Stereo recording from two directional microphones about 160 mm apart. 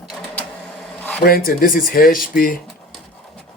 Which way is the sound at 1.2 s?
65° left (ahead or behind).